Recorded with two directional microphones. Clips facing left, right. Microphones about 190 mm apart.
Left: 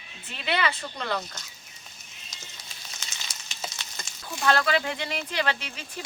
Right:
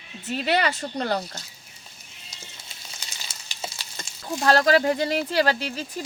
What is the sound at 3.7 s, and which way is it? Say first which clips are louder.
Speech: right 1 dB; 30° right (ahead or behind).